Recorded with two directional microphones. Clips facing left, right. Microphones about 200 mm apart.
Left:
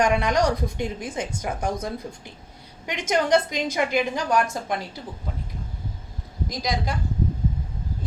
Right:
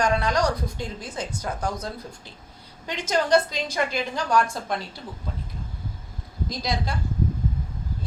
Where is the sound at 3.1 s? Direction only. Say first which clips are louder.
Even; 20° left (ahead or behind).